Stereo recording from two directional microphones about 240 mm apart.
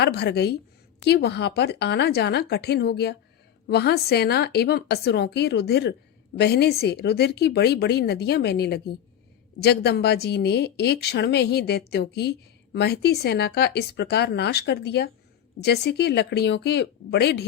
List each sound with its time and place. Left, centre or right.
0.0 s a woman's voice: left